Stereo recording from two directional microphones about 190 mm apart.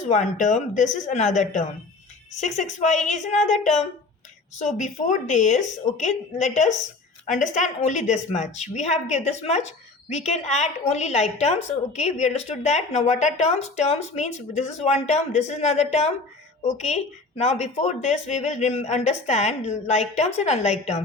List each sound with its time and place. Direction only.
0.0 s a woman's voice: 40° left (ahead or behind)